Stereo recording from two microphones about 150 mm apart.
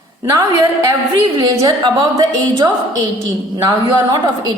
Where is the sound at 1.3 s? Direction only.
25° right (ahead or behind).